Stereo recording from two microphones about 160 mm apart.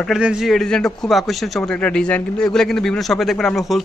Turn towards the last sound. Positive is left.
turn(degrees=0)  # may be behind; listen again after turning